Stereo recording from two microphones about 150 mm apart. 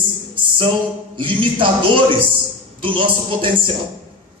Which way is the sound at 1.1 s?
35° right (ahead or behind).